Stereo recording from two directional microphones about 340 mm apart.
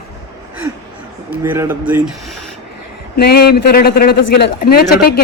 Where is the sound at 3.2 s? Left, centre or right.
Left.